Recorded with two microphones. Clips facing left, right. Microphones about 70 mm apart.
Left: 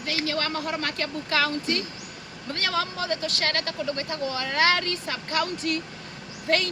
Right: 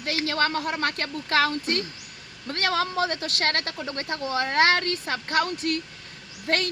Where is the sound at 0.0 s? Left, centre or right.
Right.